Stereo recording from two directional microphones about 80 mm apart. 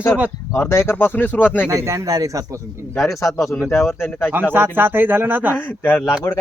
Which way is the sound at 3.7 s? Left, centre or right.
Left.